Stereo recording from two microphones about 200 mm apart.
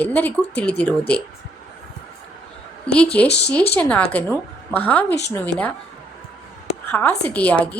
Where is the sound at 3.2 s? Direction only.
55° left (ahead or behind).